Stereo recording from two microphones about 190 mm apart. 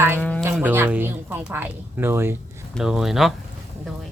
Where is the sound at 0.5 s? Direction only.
10° right (ahead or behind).